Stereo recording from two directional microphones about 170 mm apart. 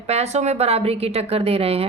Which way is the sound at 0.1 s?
40° right (ahead or behind).